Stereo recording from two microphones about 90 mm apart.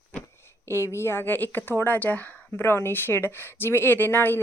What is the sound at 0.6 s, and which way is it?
A woman's voice, 30° left (ahead or behind).